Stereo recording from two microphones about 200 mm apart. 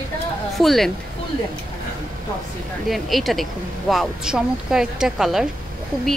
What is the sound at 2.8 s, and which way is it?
Speech, centre (ahead or behind).